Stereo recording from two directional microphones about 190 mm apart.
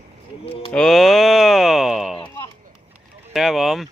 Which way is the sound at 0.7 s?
5° left (ahead or behind).